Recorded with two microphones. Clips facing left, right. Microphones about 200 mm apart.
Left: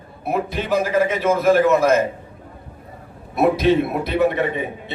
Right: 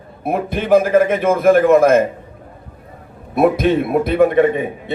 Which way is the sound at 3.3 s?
50° right (ahead or behind).